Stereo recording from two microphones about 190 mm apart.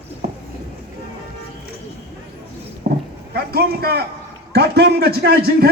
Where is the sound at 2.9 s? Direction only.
55° right (ahead or behind).